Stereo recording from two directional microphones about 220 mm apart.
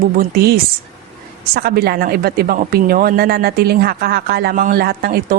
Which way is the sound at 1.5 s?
45° right (ahead or behind).